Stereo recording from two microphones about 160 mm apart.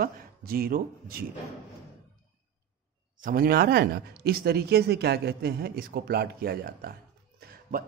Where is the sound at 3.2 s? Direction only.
60° right (ahead or behind).